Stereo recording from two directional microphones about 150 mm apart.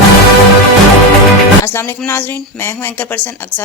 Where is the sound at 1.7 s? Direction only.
15° left (ahead or behind).